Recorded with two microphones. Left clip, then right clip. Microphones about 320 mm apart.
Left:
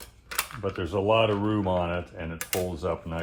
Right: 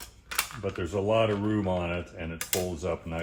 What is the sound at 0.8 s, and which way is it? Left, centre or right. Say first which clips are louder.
Speech: left 3 dB; centre.